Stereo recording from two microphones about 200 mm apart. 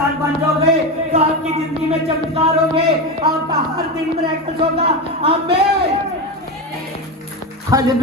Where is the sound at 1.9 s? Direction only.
30° right (ahead or behind).